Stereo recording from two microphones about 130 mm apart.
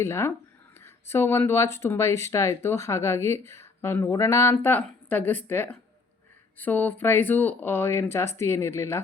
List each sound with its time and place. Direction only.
0.0 s speech: 20° left (ahead or behind)